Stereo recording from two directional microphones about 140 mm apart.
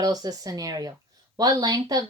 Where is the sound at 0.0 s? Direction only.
25° right (ahead or behind).